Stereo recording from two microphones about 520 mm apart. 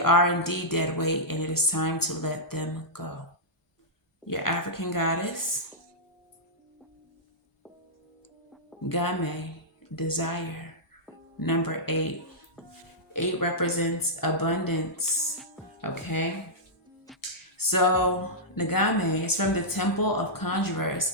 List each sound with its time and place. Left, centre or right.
0.0 s speech: left
4.3 s speech: left
8.8 s speech: left
13.1 s speech: left
17.2 s a sound: left
18.5 s speech: left